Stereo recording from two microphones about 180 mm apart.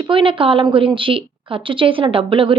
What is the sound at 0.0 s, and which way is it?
A woman's voice, 30° right (ahead or behind).